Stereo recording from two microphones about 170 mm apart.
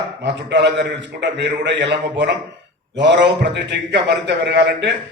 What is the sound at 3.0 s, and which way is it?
A man's voice, 90° right.